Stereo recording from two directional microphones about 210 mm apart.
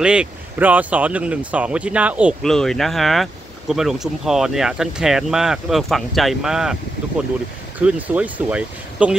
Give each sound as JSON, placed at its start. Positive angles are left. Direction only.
{"t": 0.0, "sound": "speech", "side_deg": -5}